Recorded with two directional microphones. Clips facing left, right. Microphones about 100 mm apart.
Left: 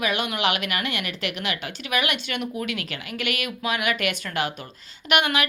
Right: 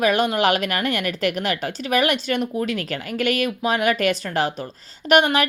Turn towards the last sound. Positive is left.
turn(degrees=-35)  # may be behind; listen again after turning